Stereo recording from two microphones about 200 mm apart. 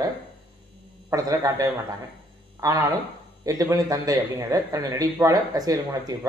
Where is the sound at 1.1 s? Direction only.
15° right (ahead or behind).